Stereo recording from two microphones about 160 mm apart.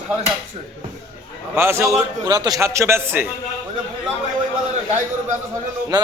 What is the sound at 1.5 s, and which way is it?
A man's voice, 15° right (ahead or behind).